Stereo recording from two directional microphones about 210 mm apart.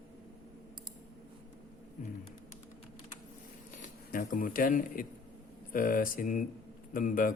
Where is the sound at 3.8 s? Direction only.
40° left (ahead or behind).